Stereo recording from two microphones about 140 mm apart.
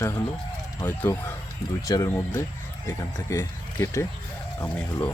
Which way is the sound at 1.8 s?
25° left (ahead or behind).